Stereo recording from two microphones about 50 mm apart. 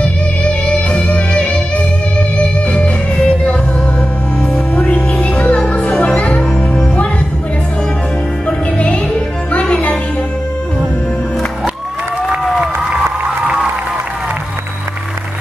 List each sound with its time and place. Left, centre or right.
0.0 s music: left
4.4 s music: left
8.5 s music: left